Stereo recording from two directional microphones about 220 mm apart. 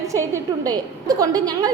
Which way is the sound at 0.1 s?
15° right (ahead or behind).